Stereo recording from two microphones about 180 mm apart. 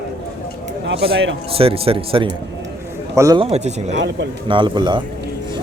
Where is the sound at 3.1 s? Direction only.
15° right (ahead or behind).